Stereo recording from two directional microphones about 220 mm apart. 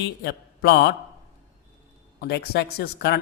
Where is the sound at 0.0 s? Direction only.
45° left (ahead or behind).